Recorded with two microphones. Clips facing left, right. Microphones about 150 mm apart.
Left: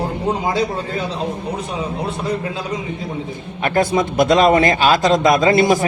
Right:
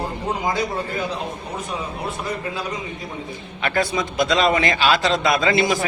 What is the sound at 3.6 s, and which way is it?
A man's voice, 50° left (ahead or behind).